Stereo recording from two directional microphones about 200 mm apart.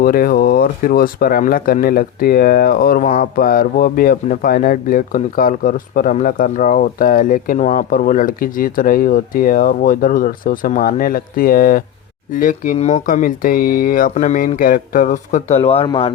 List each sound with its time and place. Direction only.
0.0 s speech: 45° left (ahead or behind); by 16.1 s 30° left (ahead or behind)